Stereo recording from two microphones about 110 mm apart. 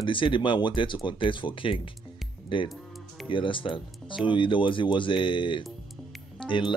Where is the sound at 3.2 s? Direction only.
50° left (ahead or behind).